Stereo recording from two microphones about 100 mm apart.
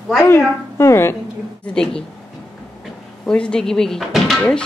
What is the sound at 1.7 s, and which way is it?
Speech, 5° left (ahead or behind).